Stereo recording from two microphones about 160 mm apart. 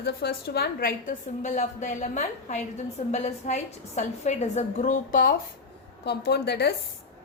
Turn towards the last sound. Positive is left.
turn(degrees=90)